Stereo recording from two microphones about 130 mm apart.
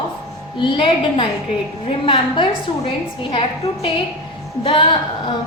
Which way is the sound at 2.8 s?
40° left (ahead or behind).